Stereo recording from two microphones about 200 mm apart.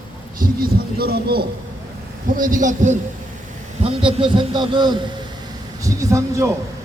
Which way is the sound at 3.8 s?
25° right (ahead or behind).